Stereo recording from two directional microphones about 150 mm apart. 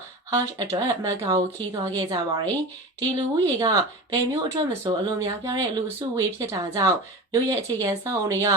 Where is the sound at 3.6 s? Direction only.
25° right (ahead or behind).